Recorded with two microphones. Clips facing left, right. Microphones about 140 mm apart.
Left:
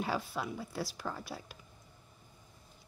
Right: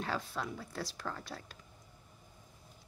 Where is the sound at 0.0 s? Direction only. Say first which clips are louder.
Left 2 dB; 10° left (ahead or behind).